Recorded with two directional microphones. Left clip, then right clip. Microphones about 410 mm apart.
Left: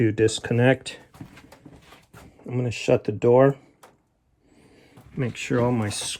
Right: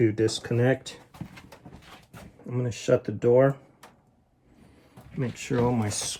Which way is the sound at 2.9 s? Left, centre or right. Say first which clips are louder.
Left 3 dB; left.